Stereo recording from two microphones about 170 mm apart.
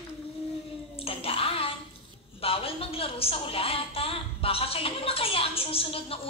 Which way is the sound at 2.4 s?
35° left (ahead or behind).